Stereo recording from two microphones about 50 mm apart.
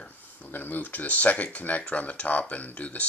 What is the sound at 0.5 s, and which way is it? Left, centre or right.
Speech, left.